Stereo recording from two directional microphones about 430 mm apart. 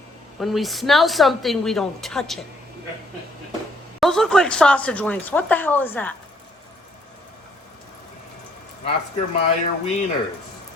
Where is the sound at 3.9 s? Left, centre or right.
Centre.